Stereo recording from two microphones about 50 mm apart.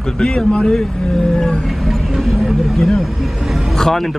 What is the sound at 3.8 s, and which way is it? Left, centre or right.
Speech, centre.